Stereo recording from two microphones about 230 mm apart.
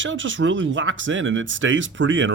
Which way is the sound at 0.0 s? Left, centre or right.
Right.